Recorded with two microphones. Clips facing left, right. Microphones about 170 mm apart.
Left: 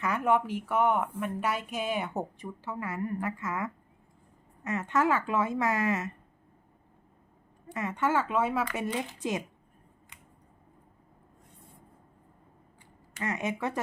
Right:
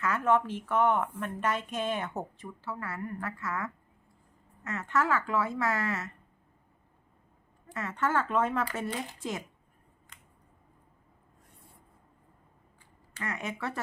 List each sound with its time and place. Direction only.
0.0 s a woman's voice: 15° left (ahead or behind)
7.7 s a woman's voice: 15° left (ahead or behind)
13.1 s speech: 20° left (ahead or behind)